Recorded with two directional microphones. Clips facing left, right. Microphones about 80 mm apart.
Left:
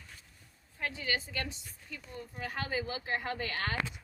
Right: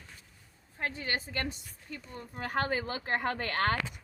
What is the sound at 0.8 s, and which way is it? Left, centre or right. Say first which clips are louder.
A woman's voice: right 1 dB; right.